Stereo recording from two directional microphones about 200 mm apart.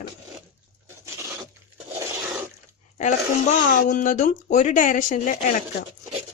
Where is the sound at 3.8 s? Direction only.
40° left (ahead or behind).